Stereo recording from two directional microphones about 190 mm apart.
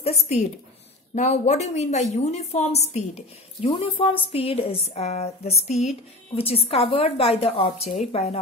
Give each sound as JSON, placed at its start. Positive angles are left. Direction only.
{"t": 0.0, "sound": "a woman's voice", "side_deg": 35}